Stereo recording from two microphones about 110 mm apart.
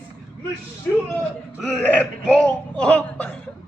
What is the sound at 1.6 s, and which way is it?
Speech, 10° left (ahead or behind).